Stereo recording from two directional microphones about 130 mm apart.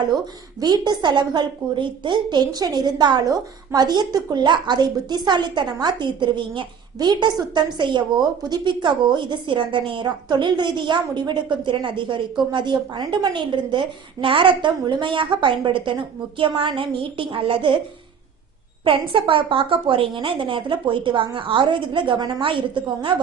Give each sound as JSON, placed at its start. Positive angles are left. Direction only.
{"t": 0.6, "sound": "a woman's voice", "side_deg": -30}
{"t": 18.9, "sound": "a woman's voice", "side_deg": -40}